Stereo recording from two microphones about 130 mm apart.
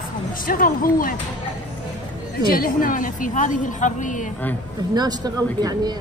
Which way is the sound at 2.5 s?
90° left.